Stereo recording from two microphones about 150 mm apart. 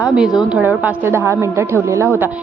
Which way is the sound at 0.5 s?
10° right (ahead or behind).